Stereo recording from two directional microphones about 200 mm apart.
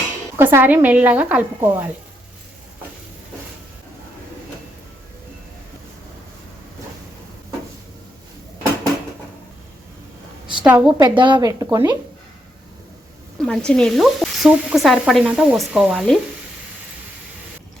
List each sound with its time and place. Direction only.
0.3 s a woman's voice: 10° right (ahead or behind)
10.6 s a woman's voice: 5° right (ahead or behind)
10.9 s speech: 20° right (ahead or behind)
13.4 s speech: 5° left (ahead or behind)